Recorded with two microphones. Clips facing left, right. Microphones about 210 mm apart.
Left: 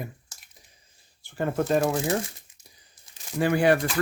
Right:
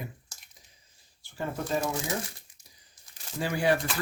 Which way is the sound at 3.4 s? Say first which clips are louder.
Left 6 dB; 60° left (ahead or behind).